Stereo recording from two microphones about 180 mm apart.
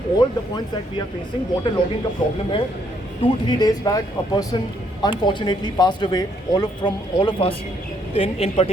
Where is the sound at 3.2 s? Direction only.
20° left (ahead or behind).